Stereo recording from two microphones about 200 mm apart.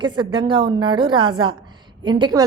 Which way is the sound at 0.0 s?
25° right (ahead or behind).